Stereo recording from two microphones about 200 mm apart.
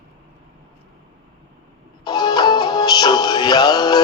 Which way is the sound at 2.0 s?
20° left (ahead or behind).